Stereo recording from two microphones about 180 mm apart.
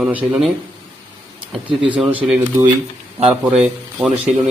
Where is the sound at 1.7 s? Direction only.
30° right (ahead or behind).